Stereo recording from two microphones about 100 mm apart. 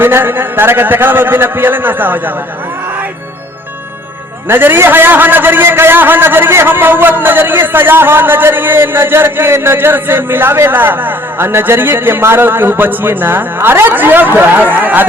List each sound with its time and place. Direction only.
0.0 s a man's voice: 20° right (ahead or behind)
4.4 s a man's voice: 20° right (ahead or behind)